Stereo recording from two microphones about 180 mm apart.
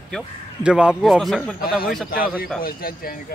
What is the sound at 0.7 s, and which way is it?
Speech, 5° right (ahead or behind).